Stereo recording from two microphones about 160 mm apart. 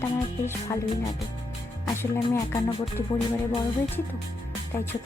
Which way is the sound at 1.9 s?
15° left (ahead or behind).